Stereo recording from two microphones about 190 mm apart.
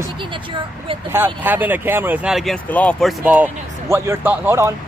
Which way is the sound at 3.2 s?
10° right (ahead or behind).